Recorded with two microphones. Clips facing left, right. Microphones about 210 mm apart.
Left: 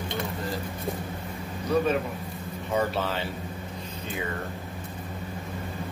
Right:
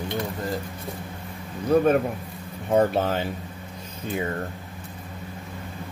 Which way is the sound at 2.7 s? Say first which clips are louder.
Right 6 dB; 50° right (ahead or behind).